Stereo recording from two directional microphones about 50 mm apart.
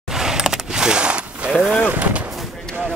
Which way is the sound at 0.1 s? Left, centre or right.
Centre.